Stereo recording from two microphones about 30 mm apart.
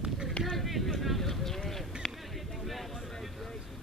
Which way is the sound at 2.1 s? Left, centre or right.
Centre.